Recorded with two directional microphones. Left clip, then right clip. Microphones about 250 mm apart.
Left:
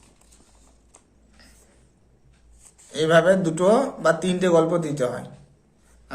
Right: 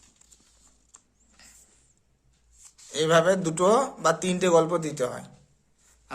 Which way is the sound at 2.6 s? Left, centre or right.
Right.